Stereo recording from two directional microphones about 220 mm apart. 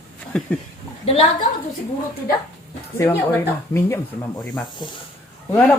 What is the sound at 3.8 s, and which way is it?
Speech, 10° left (ahead or behind).